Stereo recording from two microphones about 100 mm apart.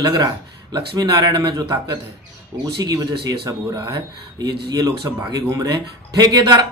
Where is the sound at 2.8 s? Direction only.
40° right (ahead or behind).